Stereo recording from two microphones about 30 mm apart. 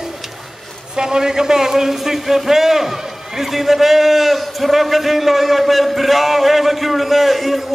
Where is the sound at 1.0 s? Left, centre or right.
Right.